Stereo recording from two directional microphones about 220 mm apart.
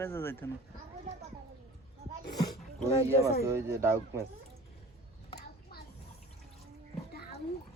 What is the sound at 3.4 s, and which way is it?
Speech, 10° right (ahead or behind).